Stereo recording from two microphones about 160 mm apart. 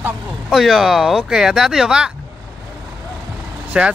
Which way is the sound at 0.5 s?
Centre (ahead or behind).